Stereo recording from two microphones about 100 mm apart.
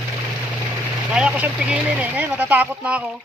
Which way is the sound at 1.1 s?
10° right (ahead or behind).